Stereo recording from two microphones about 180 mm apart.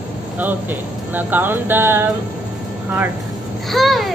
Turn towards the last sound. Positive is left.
turn(degrees=0)  # may be behind; listen again after turning